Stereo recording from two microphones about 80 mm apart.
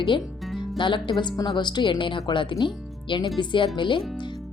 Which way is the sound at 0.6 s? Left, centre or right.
Left.